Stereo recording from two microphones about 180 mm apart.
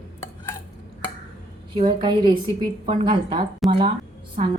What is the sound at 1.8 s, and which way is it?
Speech, 25° right (ahead or behind).